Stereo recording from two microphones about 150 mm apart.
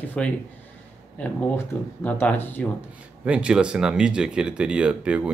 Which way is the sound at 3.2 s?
10° right (ahead or behind).